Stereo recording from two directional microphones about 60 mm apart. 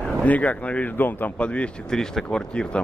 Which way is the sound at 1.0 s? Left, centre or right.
Left.